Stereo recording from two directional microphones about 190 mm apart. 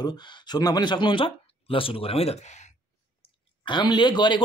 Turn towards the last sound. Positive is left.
turn(degrees=25)  # may be behind; listen again after turning